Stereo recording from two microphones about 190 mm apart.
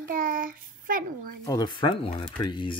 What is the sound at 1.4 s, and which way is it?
Speech, 20° left (ahead or behind).